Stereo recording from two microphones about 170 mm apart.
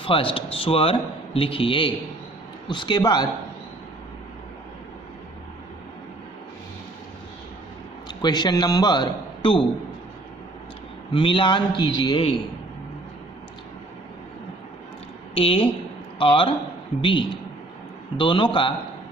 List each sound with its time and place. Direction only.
0.0 s a man's voice: 30° left (ahead or behind)
8.0 s a man's voice: 25° left (ahead or behind)
11.1 s a man's voice: 30° left (ahead or behind)
15.4 s a man's voice: 35° left (ahead or behind)